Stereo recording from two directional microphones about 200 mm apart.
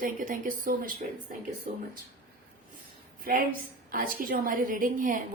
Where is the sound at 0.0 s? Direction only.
45° right (ahead or behind).